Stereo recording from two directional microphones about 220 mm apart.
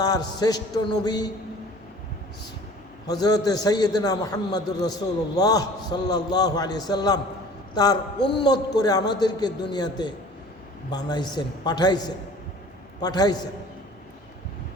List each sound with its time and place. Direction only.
0.0 s a man's voice: 15° left (ahead or behind)
3.1 s a man's voice: 15° left (ahead or behind)
8.2 s a man's voice: 50° left (ahead or behind)
8.4 s a man's voice: 20° left (ahead or behind)